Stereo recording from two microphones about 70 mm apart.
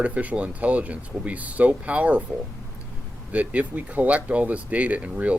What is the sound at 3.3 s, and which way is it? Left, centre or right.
Speech, right.